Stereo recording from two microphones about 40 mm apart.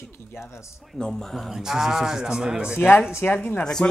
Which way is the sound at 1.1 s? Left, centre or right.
Centre.